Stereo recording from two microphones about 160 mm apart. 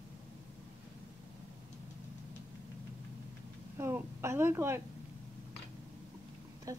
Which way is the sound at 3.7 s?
15° right (ahead or behind).